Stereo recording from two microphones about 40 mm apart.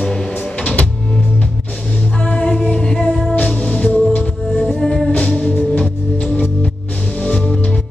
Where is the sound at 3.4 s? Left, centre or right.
Left.